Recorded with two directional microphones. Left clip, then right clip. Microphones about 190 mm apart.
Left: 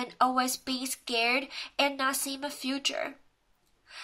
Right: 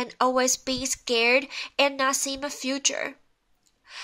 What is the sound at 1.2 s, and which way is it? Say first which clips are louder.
Speech: right 6 dB; 45° right (ahead or behind).